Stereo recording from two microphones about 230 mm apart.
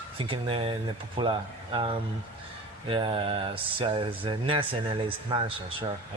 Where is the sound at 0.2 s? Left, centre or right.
Right.